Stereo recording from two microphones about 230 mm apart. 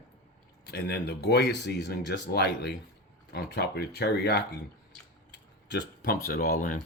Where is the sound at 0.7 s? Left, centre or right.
Left.